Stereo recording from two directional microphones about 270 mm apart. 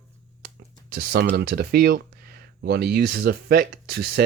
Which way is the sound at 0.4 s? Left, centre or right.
Right.